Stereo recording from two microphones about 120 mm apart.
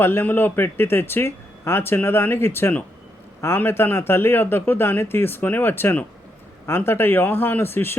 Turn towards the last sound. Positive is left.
turn(degrees=20)  # may be behind; listen again after turning